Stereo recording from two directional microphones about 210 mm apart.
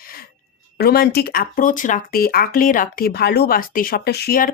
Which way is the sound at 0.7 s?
45° left (ahead or behind).